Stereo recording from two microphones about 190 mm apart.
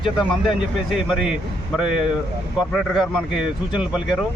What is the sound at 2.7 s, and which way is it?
Speech, centre (ahead or behind).